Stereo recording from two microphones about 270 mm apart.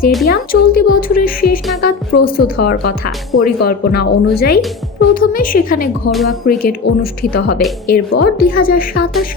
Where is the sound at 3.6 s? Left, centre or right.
Left.